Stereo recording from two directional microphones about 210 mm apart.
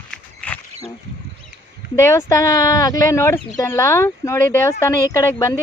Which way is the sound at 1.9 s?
15° left (ahead or behind).